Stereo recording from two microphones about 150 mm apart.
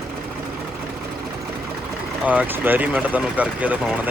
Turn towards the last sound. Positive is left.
turn(degrees=-10)  # may be behind; listen again after turning